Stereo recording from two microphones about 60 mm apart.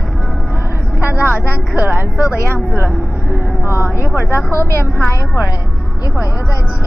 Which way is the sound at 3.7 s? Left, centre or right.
Left.